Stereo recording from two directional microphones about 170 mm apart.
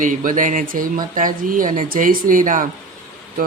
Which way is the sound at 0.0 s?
50° right (ahead or behind).